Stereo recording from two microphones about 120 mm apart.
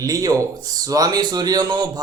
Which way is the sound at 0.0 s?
30° right (ahead or behind).